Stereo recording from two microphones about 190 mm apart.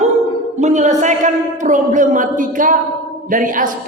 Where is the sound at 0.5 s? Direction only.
40° right (ahead or behind).